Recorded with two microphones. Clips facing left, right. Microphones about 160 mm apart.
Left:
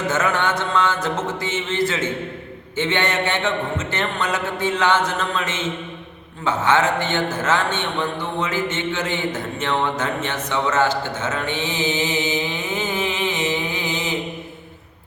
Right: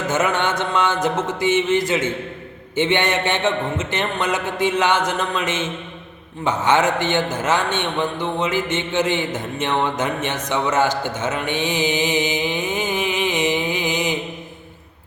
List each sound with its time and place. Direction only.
0.1 s mantra: 20° right (ahead or behind)
0.7 s a sound: 20° right (ahead or behind)
1.0 s a man's voice: 15° right (ahead or behind)